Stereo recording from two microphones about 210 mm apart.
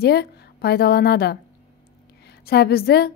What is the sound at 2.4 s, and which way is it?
Speech, 50° left (ahead or behind).